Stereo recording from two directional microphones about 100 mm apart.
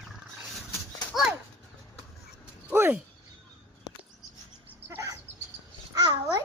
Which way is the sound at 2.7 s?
25° right (ahead or behind).